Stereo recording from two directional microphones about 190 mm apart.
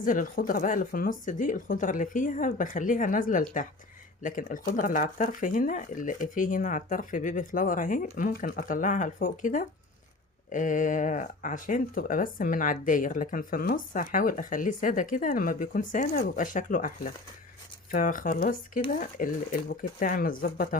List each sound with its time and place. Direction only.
0.0 s speech: 45° left (ahead or behind)